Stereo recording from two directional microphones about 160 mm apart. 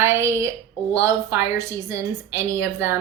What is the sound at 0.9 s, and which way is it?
Speech, 20° right (ahead or behind).